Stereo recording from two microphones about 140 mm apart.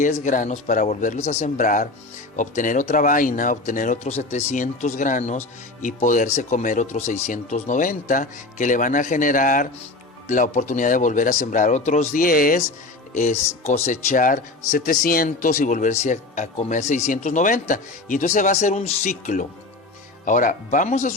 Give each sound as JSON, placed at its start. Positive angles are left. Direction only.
{"t": 0.0, "sound": "speech", "side_deg": 60}
{"t": 13.7, "sound": "speech", "side_deg": 50}
{"t": 14.7, "sound": "speech", "side_deg": 85}